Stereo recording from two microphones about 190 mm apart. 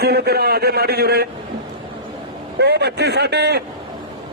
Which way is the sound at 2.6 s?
60° right (ahead or behind).